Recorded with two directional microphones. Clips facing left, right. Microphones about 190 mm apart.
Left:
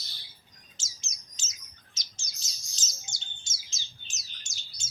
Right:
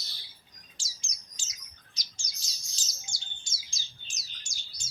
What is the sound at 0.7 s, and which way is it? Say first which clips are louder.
Bird: right 1 dB; 20° left (ahead or behind).